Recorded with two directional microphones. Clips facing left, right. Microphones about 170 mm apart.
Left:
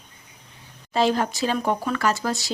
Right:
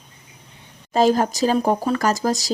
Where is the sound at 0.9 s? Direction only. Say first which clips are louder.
Right 4 dB; 40° right (ahead or behind).